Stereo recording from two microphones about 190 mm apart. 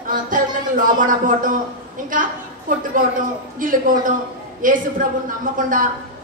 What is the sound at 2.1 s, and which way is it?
A woman's voice, 45° right (ahead or behind).